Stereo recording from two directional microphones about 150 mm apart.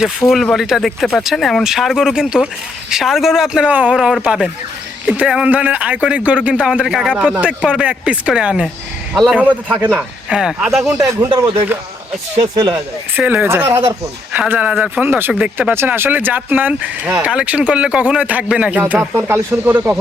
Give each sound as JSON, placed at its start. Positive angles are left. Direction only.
{"t": 0.0, "sound": "speech", "side_deg": 0}
{"t": 10.8, "sound": "speech", "side_deg": -20}
{"t": 12.4, "sound": "speech", "side_deg": -30}
{"t": 13.1, "sound": "speech", "side_deg": -10}